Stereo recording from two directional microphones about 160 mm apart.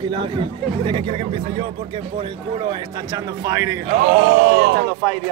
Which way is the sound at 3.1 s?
20° right (ahead or behind).